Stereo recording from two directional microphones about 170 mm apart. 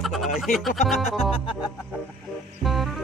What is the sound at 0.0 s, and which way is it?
Music, centre (ahead or behind).